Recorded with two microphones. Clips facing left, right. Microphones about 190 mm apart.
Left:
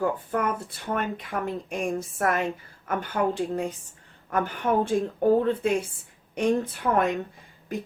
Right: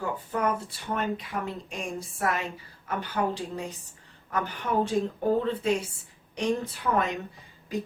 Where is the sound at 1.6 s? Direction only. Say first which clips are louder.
Left 6 dB; 55° left (ahead or behind).